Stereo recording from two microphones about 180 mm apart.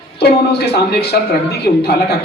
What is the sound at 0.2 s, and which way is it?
Speech, 65° left (ahead or behind).